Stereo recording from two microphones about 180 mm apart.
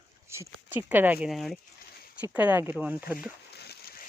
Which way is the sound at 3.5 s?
65° left (ahead or behind).